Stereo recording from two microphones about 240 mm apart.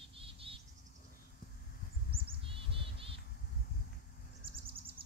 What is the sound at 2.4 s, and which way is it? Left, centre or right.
Bird, right.